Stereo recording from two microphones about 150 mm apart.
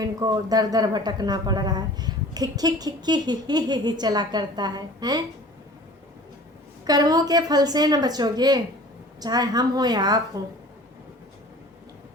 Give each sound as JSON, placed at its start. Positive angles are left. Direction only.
{"t": 0.0, "sound": "speech", "side_deg": -25}
{"t": 6.8, "sound": "speech", "side_deg": -25}